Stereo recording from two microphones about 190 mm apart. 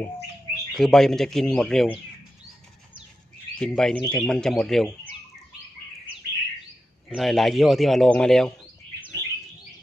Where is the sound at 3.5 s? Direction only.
5° left (ahead or behind).